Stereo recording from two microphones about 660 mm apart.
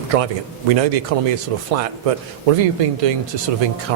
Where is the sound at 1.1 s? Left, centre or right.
Right.